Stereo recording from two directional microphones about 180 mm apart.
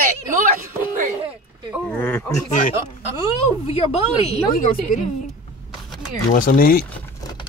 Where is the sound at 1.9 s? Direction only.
10° left (ahead or behind).